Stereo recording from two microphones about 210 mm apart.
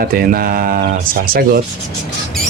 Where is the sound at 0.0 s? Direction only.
45° right (ahead or behind).